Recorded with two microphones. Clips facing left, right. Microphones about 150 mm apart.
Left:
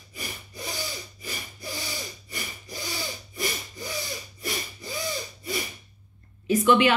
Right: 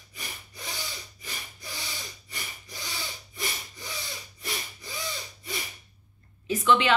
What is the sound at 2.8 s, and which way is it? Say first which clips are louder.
Tools: left 4 dB; 10° left (ahead or behind).